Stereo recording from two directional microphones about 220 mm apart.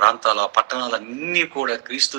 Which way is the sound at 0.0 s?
50° right (ahead or behind).